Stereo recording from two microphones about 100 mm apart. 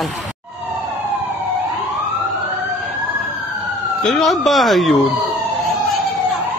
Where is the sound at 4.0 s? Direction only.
Centre (ahead or behind).